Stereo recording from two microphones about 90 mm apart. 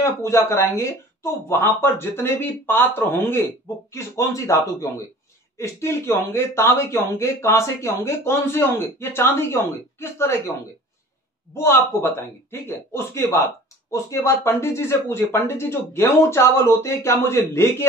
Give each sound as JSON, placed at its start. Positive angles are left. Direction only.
{"t": 0.0, "sound": "speech", "side_deg": 30}
{"t": 11.5, "sound": "speech", "side_deg": 25}